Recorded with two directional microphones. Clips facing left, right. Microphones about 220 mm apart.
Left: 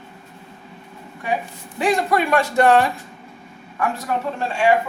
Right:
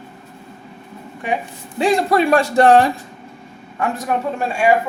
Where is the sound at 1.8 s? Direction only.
30° right (ahead or behind).